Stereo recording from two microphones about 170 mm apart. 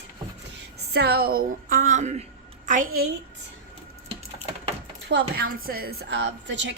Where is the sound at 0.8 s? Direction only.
70° right (ahead or behind); by 3.0 s 50° right (ahead or behind).